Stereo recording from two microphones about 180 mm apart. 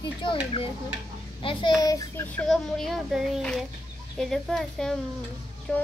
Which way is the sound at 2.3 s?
Centre (ahead or behind).